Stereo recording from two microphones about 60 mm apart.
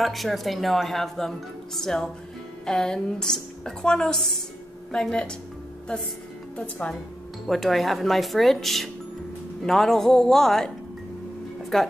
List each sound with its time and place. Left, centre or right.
0.0 s a woman's voice: centre
6.5 s speech: left
7.4 s speech: centre
11.7 s a woman's voice: centre